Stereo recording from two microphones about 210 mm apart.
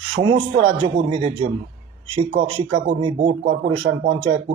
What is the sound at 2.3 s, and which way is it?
Speech, 25° right (ahead or behind).